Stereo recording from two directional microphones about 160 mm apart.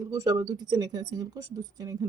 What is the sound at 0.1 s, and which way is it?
Speech, 20° right (ahead or behind).